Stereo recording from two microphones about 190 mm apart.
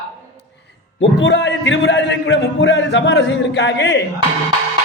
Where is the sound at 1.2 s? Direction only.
70° left (ahead or behind).